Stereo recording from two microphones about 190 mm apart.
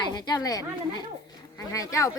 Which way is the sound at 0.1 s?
20° left (ahead or behind).